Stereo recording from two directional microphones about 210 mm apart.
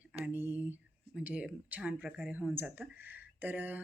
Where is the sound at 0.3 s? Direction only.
10° right (ahead or behind).